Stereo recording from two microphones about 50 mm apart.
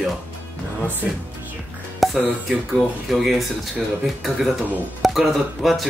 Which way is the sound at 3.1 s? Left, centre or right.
Centre.